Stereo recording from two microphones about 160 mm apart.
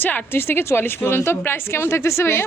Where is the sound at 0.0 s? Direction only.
10° left (ahead or behind).